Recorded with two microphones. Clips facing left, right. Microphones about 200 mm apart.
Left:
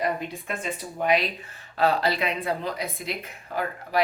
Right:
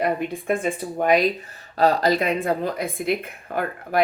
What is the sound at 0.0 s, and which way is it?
A woman's voice, 55° right (ahead or behind).